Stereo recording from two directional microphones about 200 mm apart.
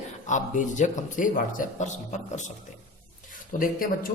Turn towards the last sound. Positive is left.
turn(degrees=45)  # may be behind; listen again after turning